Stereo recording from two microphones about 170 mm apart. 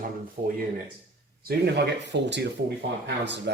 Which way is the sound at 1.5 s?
75° right (ahead or behind).